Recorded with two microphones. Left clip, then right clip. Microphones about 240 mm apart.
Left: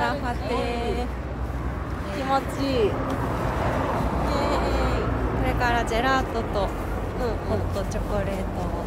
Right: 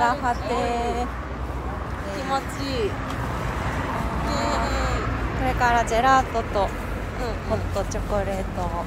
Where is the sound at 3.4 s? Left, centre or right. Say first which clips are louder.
Left 4 dB; left.